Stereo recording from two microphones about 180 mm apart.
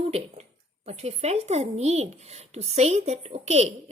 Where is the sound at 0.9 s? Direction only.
35° right (ahead or behind).